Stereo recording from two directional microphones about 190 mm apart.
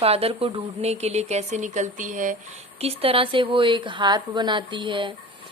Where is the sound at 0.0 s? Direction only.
30° right (ahead or behind).